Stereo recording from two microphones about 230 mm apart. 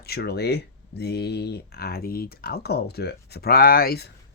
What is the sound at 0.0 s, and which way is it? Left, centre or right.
Speech, left.